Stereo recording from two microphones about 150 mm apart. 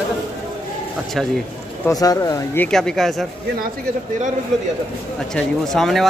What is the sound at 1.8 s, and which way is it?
Speech, 25° left (ahead or behind).